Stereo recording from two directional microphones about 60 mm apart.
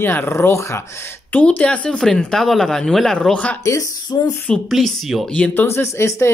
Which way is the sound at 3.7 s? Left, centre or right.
Left.